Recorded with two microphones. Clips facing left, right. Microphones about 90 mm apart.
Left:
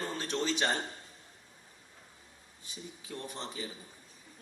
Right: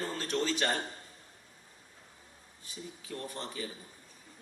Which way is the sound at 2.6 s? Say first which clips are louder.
Right 1 dB; 20° left (ahead or behind).